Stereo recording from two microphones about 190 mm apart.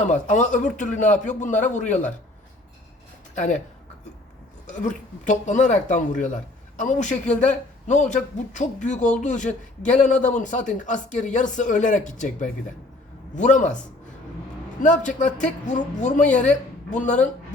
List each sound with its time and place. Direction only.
0.0 s speech: 40° left (ahead or behind)
3.3 s speech: 40° left (ahead or behind)
4.6 s speech: 40° left (ahead or behind)
14.8 s speech: 40° left (ahead or behind)